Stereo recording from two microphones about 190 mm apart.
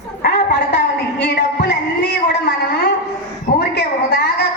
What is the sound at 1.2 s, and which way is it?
Speech, 60° left (ahead or behind).